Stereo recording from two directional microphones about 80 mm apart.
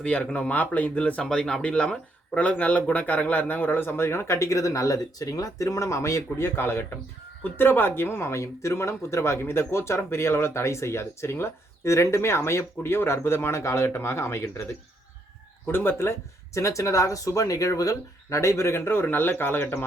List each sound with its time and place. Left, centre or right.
0.0 s speech: centre